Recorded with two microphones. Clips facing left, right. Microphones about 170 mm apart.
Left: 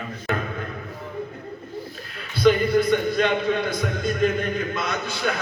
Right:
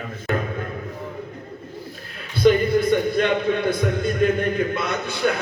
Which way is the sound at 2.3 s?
55° right (ahead or behind).